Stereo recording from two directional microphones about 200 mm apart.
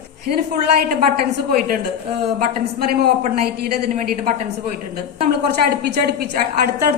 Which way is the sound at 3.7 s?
45° right (ahead or behind).